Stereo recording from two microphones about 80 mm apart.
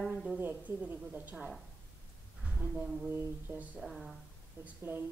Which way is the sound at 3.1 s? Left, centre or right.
Right.